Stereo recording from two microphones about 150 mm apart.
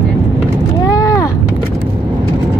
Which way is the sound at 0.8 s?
25° left (ahead or behind).